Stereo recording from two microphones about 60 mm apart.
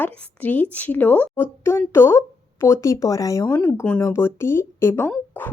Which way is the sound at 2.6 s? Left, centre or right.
Left.